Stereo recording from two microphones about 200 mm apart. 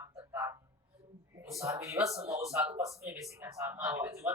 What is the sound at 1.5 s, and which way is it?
Speech, 15° right (ahead or behind).